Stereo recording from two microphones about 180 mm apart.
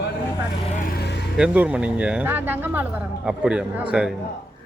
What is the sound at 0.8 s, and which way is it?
Speech, 55° left (ahead or behind).